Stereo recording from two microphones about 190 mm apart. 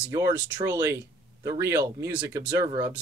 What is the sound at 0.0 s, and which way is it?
Speech, 10° right (ahead or behind).